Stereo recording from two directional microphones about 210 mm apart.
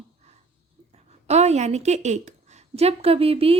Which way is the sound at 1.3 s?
30° right (ahead or behind).